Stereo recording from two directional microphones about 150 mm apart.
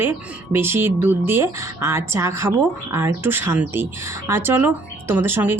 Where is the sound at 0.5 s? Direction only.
15° right (ahead or behind).